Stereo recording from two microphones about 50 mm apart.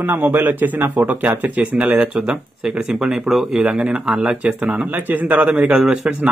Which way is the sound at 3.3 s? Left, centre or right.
Centre.